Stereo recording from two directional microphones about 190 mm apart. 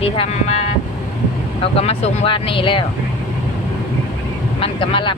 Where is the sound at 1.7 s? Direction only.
30° left (ahead or behind).